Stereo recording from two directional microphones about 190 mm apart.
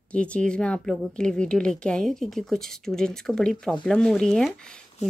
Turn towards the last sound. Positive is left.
turn(degrees=5)  # may be behind; listen again after turning